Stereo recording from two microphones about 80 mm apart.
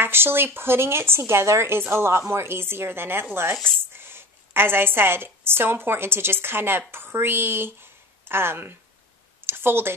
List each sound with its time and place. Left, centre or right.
0.0 s a woman's voice: right